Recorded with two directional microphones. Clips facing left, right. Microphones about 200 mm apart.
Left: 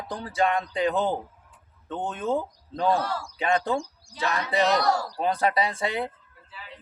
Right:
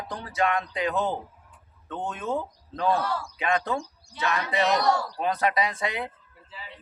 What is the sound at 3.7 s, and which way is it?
Speech, 35° left (ahead or behind).